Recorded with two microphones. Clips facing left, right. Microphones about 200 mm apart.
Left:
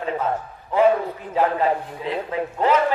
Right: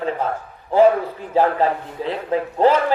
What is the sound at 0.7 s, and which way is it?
A man's voice, 30° right (ahead or behind).